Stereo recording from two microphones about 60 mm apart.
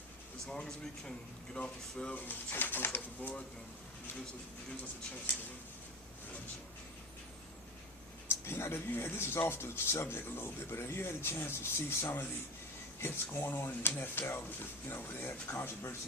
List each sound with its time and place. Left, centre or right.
0.4 s speech: centre
2.1 s speech: left
8.3 s speech: left
13.0 s speech: left